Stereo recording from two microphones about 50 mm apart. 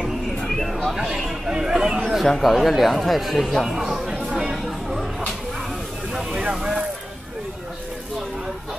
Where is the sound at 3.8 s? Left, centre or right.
Centre.